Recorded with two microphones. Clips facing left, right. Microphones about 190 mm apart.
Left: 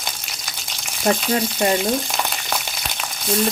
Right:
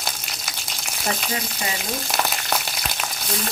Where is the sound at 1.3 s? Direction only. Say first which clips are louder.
Left 9 dB; 55° left (ahead or behind).